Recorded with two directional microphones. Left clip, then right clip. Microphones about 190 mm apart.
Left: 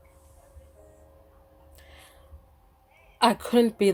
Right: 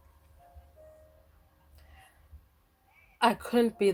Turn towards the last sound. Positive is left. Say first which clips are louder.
# left 4 dB
turn(degrees=20)  # may be behind; listen again after turning